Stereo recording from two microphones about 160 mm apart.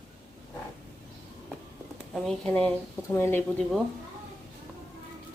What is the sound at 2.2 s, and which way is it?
Speech, 5° left (ahead or behind).